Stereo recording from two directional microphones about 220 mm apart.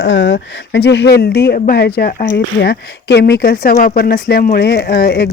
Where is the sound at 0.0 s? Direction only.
55° left (ahead or behind).